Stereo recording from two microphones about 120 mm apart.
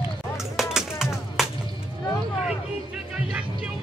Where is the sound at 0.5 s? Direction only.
5° right (ahead or behind).